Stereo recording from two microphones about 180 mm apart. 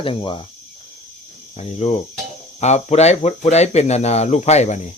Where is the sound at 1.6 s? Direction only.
35° left (ahead or behind).